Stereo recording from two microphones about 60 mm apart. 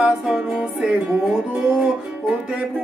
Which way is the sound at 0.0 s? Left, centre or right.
Centre.